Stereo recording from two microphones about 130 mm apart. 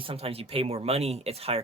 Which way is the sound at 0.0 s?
45° right (ahead or behind).